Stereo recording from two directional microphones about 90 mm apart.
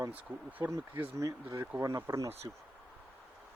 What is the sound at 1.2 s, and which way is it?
Speech, 35° right (ahead or behind).